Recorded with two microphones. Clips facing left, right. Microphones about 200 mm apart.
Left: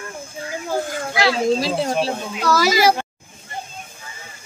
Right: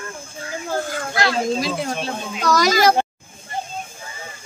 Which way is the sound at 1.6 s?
30° left (ahead or behind).